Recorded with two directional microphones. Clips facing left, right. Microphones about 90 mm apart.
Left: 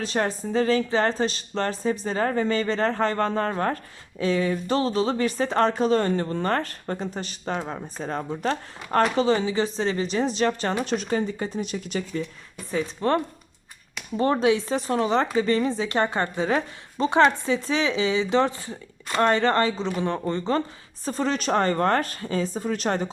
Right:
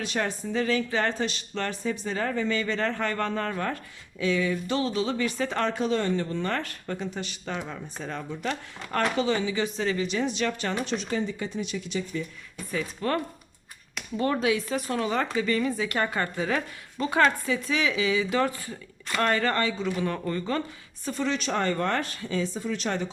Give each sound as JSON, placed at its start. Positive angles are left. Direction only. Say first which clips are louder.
{"t": 0.0, "sound": "speech", "louder": "left 4 dB", "side_deg": 35}
{"t": 12.7, "sound": "speech", "louder": "left 5 dB", "side_deg": 30}